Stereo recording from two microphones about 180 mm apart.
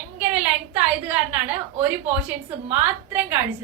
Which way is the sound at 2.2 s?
10° right (ahead or behind).